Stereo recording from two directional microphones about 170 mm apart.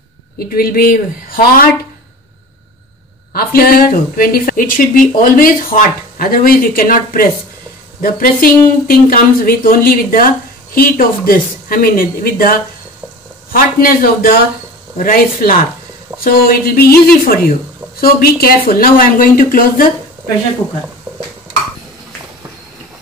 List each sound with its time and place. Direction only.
0.4 s speech: 60° left (ahead or behind)
3.3 s speech: 60° left (ahead or behind)
16.1 s a sound: 20° right (ahead or behind)
16.4 s speech: 60° left (ahead or behind)